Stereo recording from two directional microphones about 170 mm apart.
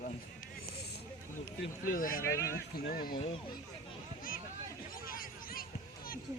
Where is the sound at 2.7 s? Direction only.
65° left (ahead or behind).